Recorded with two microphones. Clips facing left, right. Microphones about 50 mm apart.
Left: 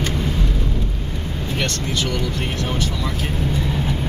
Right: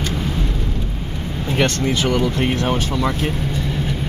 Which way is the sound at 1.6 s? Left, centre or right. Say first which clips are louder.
Right 6 dB; right.